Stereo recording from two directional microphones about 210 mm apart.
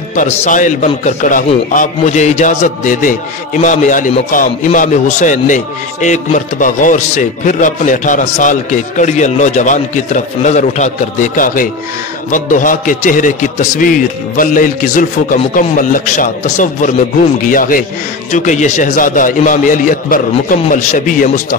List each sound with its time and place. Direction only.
0.1 s a man's voice: 35° left (ahead or behind)